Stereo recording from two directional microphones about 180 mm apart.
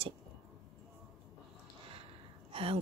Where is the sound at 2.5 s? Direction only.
30° right (ahead or behind).